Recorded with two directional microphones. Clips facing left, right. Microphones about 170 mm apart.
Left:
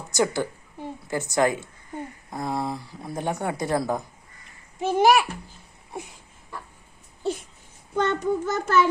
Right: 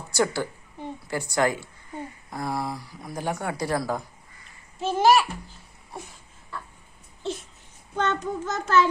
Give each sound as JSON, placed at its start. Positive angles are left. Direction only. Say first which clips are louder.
{"t": 0.1, "sound": "a child's voice", "louder": "left 1 dB", "side_deg": 20}
{"t": 7.9, "sound": "a child's voice", "louder": "left 3 dB", "side_deg": 10}